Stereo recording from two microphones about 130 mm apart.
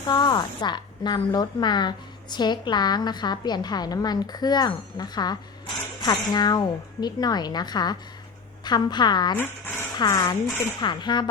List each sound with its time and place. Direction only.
0.1 s a woman's voice: 35° left (ahead or behind)